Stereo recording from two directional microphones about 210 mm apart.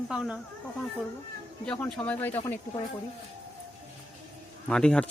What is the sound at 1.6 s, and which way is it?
Speech, 5° left (ahead or behind).